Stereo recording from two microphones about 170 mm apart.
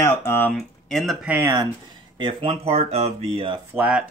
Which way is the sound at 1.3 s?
15° right (ahead or behind).